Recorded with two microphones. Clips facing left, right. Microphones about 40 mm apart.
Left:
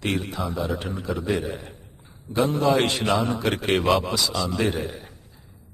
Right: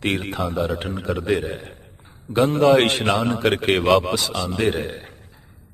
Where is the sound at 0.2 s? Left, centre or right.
Right.